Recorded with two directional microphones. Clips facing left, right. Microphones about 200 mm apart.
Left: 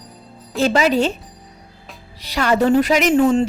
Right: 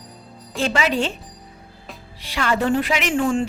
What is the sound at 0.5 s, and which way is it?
Speech, 40° left (ahead or behind).